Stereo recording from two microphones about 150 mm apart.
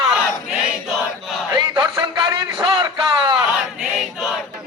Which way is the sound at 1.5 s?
30° right (ahead or behind).